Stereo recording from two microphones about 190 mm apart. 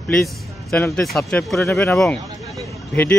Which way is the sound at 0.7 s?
10° left (ahead or behind).